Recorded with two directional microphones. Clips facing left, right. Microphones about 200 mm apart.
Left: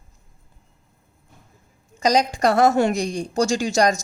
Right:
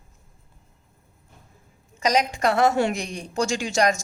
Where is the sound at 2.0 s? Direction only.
35° left (ahead or behind).